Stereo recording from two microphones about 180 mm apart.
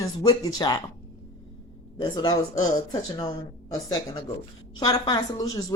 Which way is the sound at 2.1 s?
20° left (ahead or behind).